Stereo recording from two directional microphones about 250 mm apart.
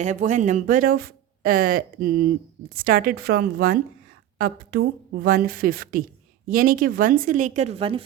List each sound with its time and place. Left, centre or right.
0.0 s speech: right